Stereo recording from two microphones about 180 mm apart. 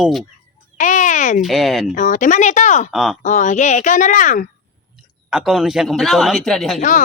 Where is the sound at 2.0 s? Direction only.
45° left (ahead or behind).